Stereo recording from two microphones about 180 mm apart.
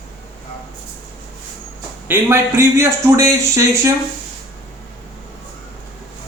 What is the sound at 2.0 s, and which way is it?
A man's voice, 10° right (ahead or behind).